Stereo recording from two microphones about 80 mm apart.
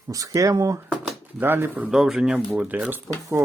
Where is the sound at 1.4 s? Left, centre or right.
Right.